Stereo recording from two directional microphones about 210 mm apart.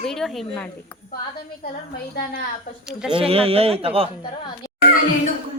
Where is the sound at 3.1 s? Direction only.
25° right (ahead or behind).